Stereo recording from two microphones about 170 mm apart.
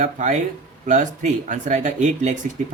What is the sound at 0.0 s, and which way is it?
Speech, 45° right (ahead or behind).